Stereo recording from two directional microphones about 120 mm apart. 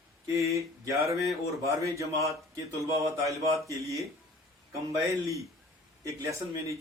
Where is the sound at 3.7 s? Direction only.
25° right (ahead or behind).